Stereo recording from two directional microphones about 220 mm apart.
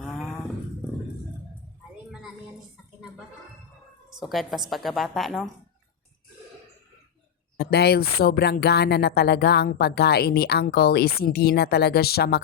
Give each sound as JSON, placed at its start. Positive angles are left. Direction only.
{"t": 0.0, "sound": "dog", "side_deg": 0}
{"t": 4.3, "sound": "a woman's voice", "side_deg": 0}
{"t": 7.6, "sound": "speech", "side_deg": 45}